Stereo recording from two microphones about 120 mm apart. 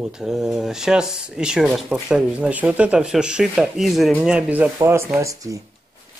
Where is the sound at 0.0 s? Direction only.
5° right (ahead or behind); by 5.6 s 25° right (ahead or behind).